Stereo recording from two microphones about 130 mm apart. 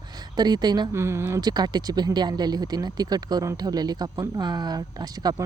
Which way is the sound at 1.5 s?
30° right (ahead or behind).